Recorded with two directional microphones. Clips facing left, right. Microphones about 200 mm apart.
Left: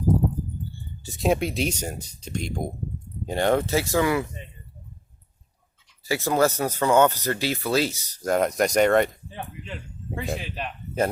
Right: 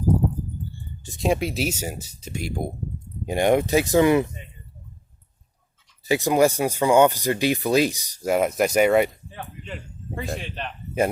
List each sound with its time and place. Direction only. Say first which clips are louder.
1.0 s speech: even; centre (ahead or behind); by 4.3 s 20° right (ahead or behind)
6.1 s speech: right 3 dB; 15° right (ahead or behind)
10.2 s speech: left 1 dB; centre (ahead or behind)